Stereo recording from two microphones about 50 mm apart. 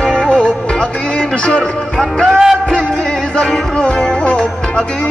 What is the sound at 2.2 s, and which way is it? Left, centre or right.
Music, centre.